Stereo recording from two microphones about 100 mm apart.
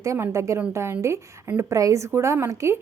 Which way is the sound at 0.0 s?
30° right (ahead or behind).